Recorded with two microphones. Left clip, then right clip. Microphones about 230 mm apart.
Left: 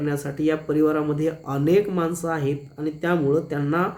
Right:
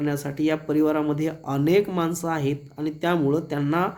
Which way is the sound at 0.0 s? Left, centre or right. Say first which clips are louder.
Left 1 dB; right.